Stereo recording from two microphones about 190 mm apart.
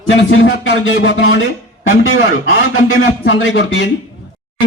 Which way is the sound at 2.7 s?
75° left (ahead or behind).